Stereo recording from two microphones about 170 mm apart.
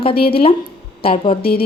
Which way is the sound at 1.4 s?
65° left (ahead or behind).